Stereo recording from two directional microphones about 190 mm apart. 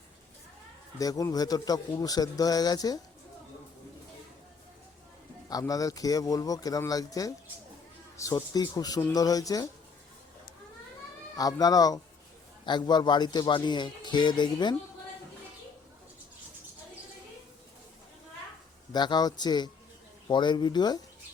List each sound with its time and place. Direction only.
0.9 s speech: 20° left (ahead or behind)
5.5 s speech: 20° left (ahead or behind)
11.3 s speech: 20° left (ahead or behind)
18.9 s speech: 20° left (ahead or behind)